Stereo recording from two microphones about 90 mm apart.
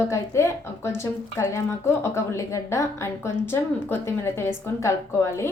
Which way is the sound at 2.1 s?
30° left (ahead or behind).